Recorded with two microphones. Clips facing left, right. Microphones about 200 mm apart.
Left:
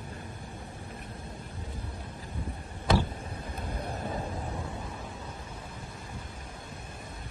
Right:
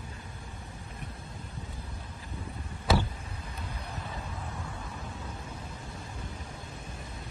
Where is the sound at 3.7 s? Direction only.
50° left (ahead or behind).